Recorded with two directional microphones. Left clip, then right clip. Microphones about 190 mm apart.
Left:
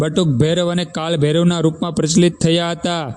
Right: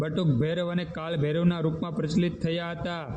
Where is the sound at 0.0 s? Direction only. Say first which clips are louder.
Left 11 dB; 50° left (ahead or behind).